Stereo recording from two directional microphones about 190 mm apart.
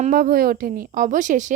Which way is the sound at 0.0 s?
50° right (ahead or behind).